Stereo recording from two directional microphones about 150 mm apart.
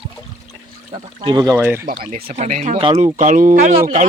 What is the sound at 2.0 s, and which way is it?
Speech, 70° right (ahead or behind).